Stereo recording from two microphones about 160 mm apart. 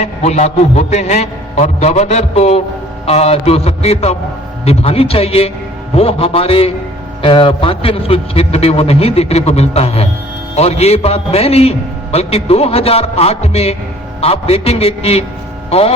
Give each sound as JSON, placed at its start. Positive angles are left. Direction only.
{"t": 0.0, "sound": "a man's voice", "side_deg": 45}